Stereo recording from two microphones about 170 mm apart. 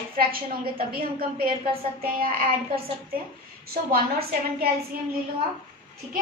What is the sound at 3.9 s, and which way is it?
Speech, 65° right (ahead or behind).